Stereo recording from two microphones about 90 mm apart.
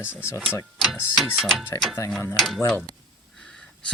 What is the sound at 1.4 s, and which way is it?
Speech, centre (ahead or behind).